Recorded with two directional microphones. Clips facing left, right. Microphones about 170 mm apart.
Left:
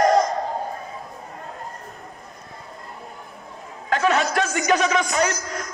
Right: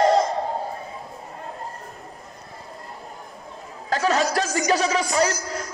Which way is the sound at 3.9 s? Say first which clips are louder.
Left 1 dB; 35° right (ahead or behind).